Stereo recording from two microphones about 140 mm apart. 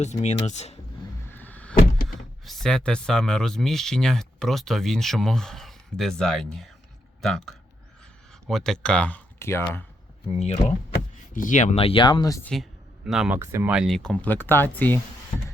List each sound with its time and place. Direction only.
0.0 s speech: 55° left (ahead or behind)
1.3 s a sound: 10° left (ahead or behind)
2.0 s speech: centre (ahead or behind); by 9.6 s 20° left (ahead or behind)
10.2 s speech: 50° left (ahead or behind)
11.3 s speech: 65° left (ahead or behind); by 12.4 s 30° left (ahead or behind)
12.4 s speech: 5° left (ahead or behind)
13.1 s speech: 5° right (ahead or behind)
13.7 s speech: centre (ahead or behind)